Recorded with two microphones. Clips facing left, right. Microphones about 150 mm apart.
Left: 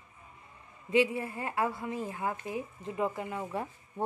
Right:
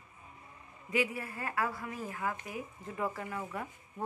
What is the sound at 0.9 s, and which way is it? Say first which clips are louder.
Speech: left 6 dB; 25° left (ahead or behind).